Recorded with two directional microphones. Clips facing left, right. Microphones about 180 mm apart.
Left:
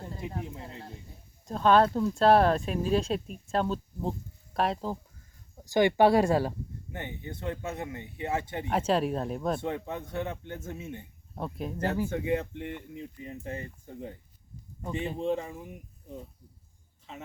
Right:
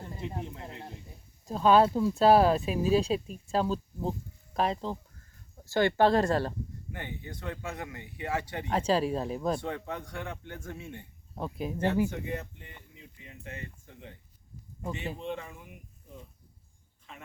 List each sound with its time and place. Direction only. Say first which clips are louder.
1.5 s speech: even; 5° right (ahead or behind)
5.6 s speech: left 2 dB; 15° left (ahead or behind)
6.9 s speech: left 2 dB; 20° left (ahead or behind)
8.7 s speech: even; 5° left (ahead or behind)
9.6 s speech: left 2 dB; 20° left (ahead or behind)
11.3 s speech: right 1 dB; centre (ahead or behind)
12.3 s speech: left 8 dB; 80° left; by 13.2 s 55° left (ahead or behind)
13.2 s speech: left 4 dB; 40° left (ahead or behind)
14.8 s speech: left 3 dB; 5° right (ahead or behind)
15.2 s speech: left 7 dB; 35° left (ahead or behind)